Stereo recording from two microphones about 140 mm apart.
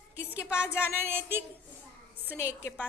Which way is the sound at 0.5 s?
10° right (ahead or behind).